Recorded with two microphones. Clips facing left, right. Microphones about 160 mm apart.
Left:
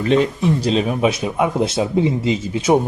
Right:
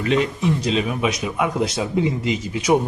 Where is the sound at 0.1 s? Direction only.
35° left (ahead or behind).